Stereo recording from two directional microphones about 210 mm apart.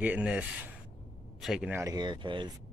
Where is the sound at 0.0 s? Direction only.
5° right (ahead or behind); by 2.5 s 20° right (ahead or behind).